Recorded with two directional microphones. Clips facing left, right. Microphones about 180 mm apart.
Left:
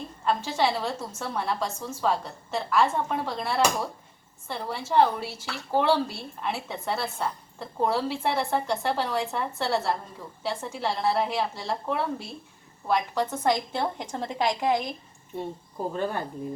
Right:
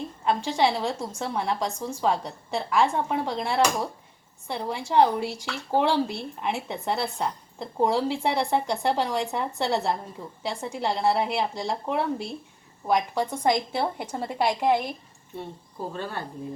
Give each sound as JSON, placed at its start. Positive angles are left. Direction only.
{"t": 0.3, "sound": "speech", "side_deg": -15}
{"t": 15.9, "sound": "speech", "side_deg": 15}